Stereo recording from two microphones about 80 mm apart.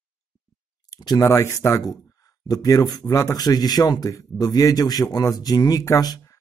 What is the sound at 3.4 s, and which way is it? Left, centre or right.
Speech, left.